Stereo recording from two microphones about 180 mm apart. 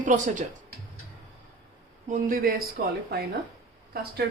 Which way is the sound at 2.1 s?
55° right (ahead or behind).